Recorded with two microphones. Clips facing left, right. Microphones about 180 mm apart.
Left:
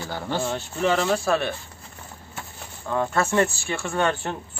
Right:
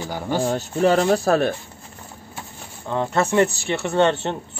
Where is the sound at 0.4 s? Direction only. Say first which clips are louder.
Right 7 dB; 35° right (ahead or behind).